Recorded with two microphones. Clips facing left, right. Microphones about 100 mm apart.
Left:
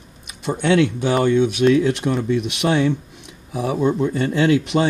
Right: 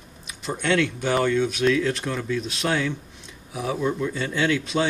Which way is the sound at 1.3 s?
65° left (ahead or behind).